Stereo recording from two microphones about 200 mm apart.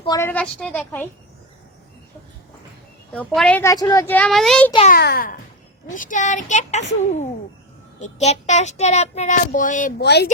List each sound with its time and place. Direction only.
0.0 s a woman's voice: 20° left (ahead or behind)
0.3 s a woman's voice: 5° left (ahead or behind)
3.1 s a woman's voice: 5° left (ahead or behind)
3.6 s a woman's voice: 15° left (ahead or behind)
4.9 s a child's voice: 50° left (ahead or behind)
7.9 s speech: 35° left (ahead or behind)
10.0 s speech: 55° left (ahead or behind)